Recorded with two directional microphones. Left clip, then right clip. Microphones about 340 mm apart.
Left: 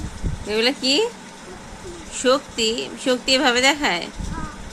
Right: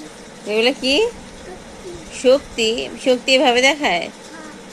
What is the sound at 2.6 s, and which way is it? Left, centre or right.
Speech, left.